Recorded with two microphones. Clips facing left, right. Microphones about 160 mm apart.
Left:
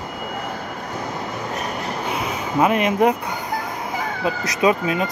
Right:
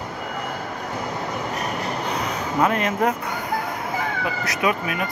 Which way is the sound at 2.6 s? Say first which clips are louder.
Left 4 dB; 15° left (ahead or behind).